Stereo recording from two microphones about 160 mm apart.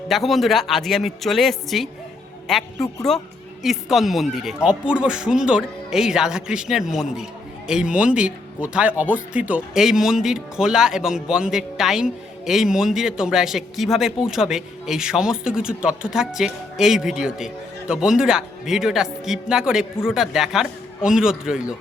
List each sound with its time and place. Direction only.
0.1 s speech: centre (ahead or behind)